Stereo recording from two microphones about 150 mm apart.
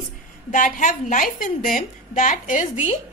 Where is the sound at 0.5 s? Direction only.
60° left (ahead or behind).